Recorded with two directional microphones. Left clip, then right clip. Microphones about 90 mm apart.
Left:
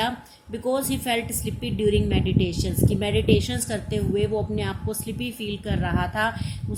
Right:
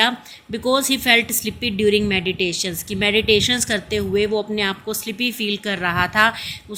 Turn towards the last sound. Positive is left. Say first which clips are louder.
# right 8 dB
turn(degrees=-40)  # may be behind; listen again after turning